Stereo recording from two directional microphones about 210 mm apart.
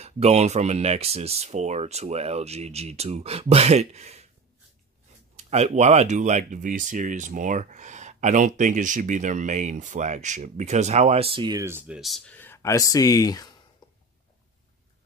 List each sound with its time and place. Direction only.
0.0 s speech: 30° right (ahead or behind)
5.3 s speech: 30° right (ahead or behind); by 13.5 s 20° left (ahead or behind)
13.8 s a sound: 20° left (ahead or behind)